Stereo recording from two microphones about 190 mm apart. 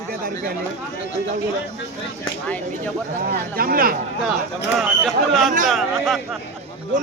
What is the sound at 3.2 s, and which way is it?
Speech, 50° right (ahead or behind).